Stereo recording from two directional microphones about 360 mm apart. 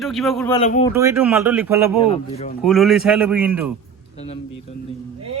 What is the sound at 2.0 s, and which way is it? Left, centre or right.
Speech, centre.